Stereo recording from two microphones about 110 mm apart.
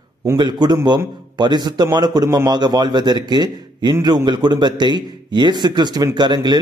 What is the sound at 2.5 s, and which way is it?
A man's voice, 40° right (ahead or behind).